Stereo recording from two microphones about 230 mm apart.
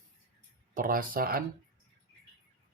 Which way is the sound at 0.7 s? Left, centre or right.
Right.